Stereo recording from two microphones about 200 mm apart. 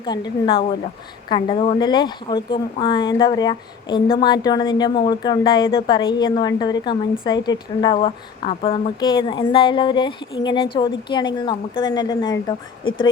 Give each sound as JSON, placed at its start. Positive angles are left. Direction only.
{"t": 0.0, "sound": "a woman's voice", "side_deg": 20}